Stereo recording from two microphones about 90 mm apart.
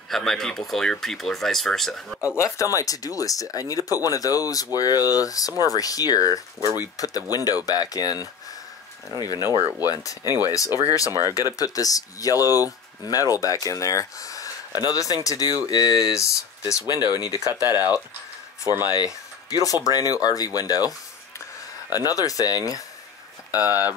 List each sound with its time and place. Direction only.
0.1 s speech: 5° left (ahead or behind)
2.3 s speech: 35° left (ahead or behind)
11.1 s speech: 30° right (ahead or behind)
11.5 s speech: 40° left (ahead or behind)
16.8 s speech: 50° left (ahead or behind)
18.9 s speech: 45° left (ahead or behind)
21.9 s speech: 40° left (ahead or behind)
23.6 s speech: 20° right (ahead or behind)